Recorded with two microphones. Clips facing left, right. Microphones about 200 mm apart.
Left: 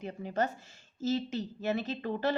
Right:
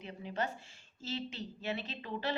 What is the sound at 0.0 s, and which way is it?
A woman's voice, 45° left (ahead or behind).